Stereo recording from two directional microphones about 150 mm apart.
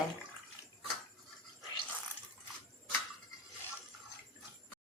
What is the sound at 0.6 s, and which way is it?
Bathtub, 15° right (ahead or behind).